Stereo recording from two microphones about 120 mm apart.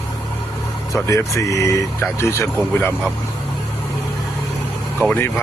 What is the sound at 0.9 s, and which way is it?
Speech, 25° left (ahead or behind).